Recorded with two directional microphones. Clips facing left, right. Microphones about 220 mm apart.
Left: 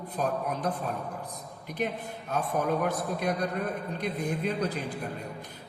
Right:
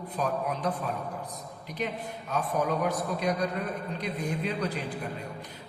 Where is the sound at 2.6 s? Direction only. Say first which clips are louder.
Even; 50° left (ahead or behind).